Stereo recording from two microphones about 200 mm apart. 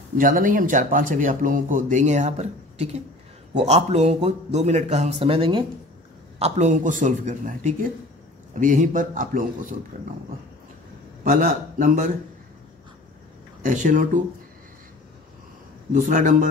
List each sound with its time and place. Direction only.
0.2 s speech: 40° right (ahead or behind)
11.2 s a man's voice: 45° right (ahead or behind)
13.6 s speech: 40° right (ahead or behind)
15.9 s speech: 40° right (ahead or behind)